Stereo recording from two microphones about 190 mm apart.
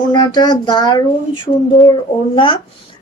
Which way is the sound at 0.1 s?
20° left (ahead or behind).